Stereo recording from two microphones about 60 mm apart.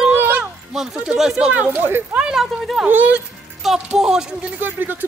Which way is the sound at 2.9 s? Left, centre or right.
Right.